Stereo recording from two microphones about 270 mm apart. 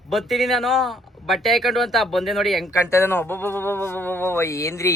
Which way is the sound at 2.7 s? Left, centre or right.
Centre.